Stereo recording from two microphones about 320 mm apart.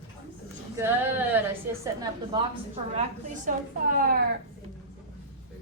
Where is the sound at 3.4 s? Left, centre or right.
Right.